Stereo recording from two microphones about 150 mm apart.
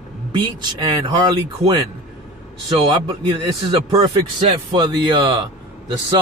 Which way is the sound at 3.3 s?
35° right (ahead or behind).